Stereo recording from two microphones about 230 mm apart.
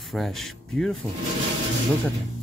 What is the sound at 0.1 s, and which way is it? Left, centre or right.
Speech, centre.